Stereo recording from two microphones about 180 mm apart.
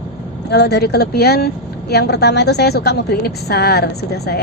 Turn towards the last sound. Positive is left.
turn(degrees=65)  # may be behind; listen again after turning